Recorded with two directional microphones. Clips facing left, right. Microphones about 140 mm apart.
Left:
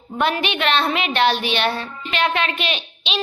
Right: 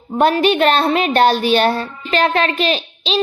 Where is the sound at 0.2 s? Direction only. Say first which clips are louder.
Right 8 dB; 40° right (ahead or behind).